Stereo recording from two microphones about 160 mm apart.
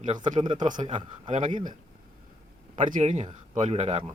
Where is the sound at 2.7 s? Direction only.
55° right (ahead or behind).